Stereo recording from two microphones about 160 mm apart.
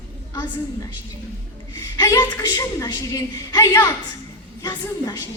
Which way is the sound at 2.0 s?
25° left (ahead or behind).